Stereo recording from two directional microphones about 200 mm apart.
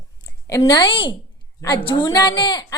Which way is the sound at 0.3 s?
15° left (ahead or behind).